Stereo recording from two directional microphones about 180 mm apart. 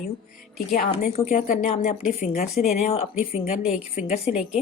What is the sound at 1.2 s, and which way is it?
Speech, 45° left (ahead or behind).